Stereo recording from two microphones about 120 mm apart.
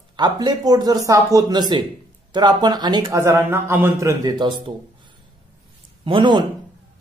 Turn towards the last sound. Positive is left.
turn(degrees=-40)  # may be behind; listen again after turning